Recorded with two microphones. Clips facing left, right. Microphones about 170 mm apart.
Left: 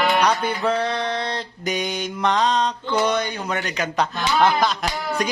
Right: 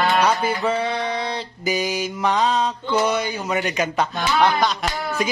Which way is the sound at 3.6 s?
20° right (ahead or behind).